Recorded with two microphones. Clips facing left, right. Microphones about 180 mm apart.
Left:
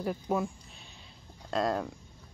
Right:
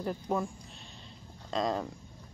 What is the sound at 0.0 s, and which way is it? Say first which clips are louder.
Speech: left 1 dB; 5° left (ahead or behind).